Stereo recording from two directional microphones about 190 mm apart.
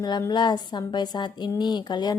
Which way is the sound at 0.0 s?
20° left (ahead or behind).